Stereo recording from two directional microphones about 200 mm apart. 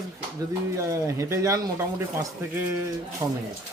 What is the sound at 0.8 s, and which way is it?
Speech, 15° right (ahead or behind).